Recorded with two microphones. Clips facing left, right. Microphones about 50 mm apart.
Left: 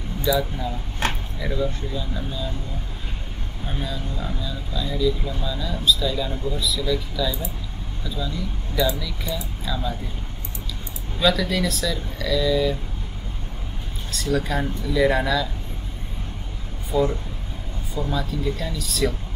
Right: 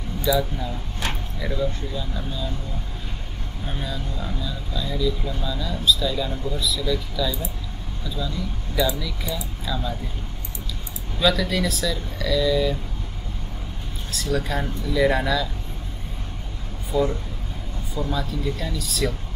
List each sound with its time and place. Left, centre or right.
0.2 s speech: centre
1.0 s a sound: left
1.4 s speech: centre
3.6 s speech: centre
9.3 s speech: centre
11.1 s speech: centre
14.1 s speech: centre
16.9 s speech: centre